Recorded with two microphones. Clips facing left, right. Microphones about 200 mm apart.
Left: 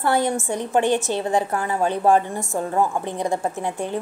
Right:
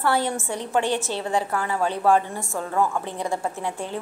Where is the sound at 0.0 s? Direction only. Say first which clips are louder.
Left 3 dB; 15° left (ahead or behind).